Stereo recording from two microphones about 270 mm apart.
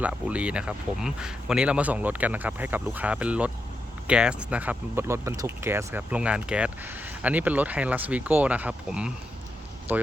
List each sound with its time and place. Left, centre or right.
0.0 s speech: centre